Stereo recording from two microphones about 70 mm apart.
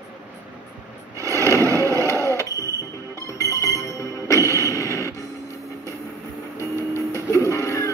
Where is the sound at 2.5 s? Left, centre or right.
Left.